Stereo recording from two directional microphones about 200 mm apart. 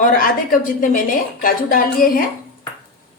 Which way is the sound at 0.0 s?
45° left (ahead or behind).